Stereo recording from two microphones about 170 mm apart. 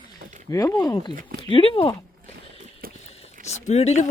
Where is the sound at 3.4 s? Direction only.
40° left (ahead or behind).